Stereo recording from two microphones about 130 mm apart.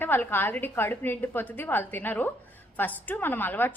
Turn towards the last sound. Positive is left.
turn(degrees=15)  # may be behind; listen again after turning